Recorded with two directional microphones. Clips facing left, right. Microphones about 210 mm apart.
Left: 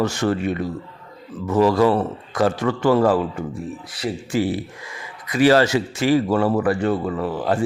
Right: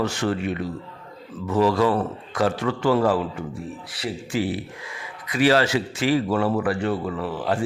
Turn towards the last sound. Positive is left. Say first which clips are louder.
# left 3 dB
turn(degrees=40)  # may be behind; listen again after turning